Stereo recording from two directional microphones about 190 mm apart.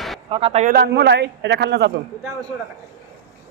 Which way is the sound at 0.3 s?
30° right (ahead or behind).